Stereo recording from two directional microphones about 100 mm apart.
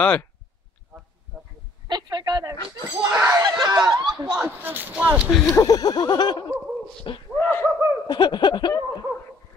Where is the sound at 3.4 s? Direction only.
40° right (ahead or behind).